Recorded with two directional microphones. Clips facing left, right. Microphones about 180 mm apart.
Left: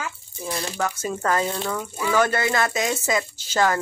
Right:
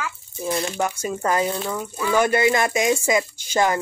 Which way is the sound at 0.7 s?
15° right (ahead or behind).